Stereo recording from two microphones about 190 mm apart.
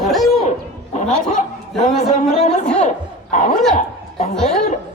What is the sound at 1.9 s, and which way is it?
Speech, 35° left (ahead or behind).